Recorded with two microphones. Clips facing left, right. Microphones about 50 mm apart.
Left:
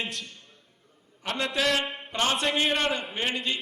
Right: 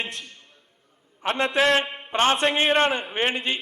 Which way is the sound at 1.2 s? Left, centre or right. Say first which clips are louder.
Right 6 dB; right.